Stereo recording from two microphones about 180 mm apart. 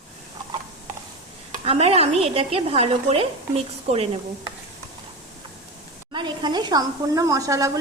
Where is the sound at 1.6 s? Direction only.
35° right (ahead or behind).